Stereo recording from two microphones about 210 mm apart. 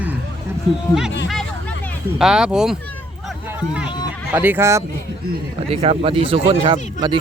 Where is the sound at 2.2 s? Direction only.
Centre (ahead or behind).